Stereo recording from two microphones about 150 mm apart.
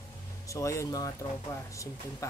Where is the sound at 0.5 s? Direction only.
20° left (ahead or behind).